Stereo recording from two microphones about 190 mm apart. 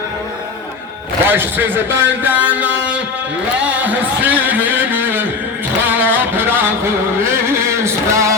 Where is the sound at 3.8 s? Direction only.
10° right (ahead or behind).